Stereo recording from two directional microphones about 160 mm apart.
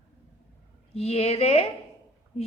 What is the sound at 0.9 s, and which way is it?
Speech, 40° left (ahead or behind).